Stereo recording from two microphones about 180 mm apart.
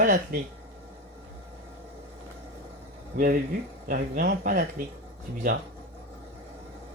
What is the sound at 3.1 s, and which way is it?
Speech, 50° right (ahead or behind).